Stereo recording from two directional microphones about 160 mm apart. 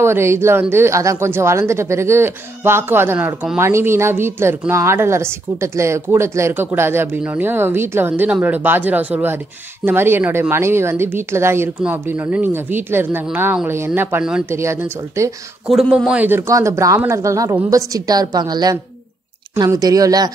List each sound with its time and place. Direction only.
0.0 s a woman's voice: 15° right (ahead or behind)
15.7 s a man's voice: centre (ahead or behind); by 20.2 s 25° right (ahead or behind)